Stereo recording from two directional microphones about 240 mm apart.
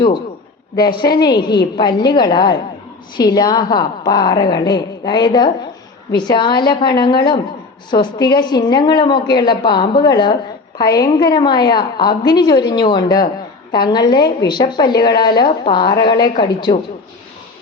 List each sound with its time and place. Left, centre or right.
0.8 s a woman's voice: centre